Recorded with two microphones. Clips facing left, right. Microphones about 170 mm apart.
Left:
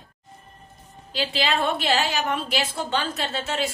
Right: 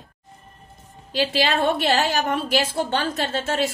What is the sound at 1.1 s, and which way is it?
A woman's voice, 45° right (ahead or behind).